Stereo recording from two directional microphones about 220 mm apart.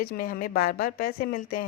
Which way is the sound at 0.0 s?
40° left (ahead or behind).